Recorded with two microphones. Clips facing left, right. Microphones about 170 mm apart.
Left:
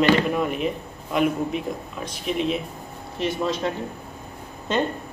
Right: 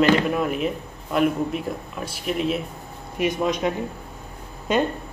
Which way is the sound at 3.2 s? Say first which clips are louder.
Right 2 dB; 15° right (ahead or behind).